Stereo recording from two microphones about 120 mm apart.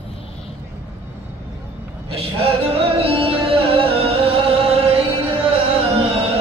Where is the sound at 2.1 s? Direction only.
55° right (ahead or behind).